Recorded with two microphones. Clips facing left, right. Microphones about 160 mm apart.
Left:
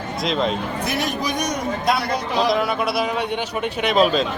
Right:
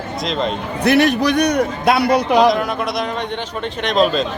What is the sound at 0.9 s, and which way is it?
A man's voice, 70° right (ahead or behind).